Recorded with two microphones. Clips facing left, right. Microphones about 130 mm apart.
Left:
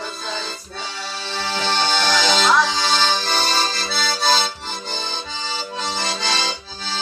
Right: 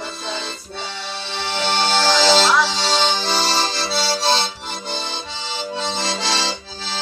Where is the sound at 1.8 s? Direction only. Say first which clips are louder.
Right 3 dB; 90° right.